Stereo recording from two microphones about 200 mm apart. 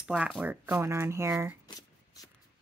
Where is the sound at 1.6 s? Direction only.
20° left (ahead or behind).